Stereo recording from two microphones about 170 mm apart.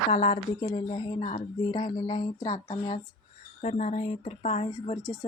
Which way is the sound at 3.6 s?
45° left (ahead or behind).